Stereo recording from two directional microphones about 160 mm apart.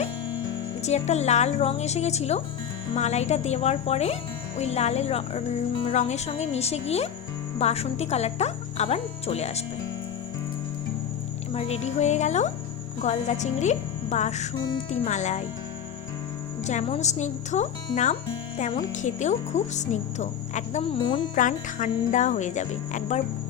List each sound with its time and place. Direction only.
0.8 s speech: 45° left (ahead or behind)
11.5 s speech: 40° left (ahead or behind)
16.6 s speech: 40° left (ahead or behind)
21.3 s speech: 55° left (ahead or behind)